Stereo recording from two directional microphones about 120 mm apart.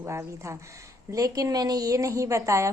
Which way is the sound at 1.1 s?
30° right (ahead or behind).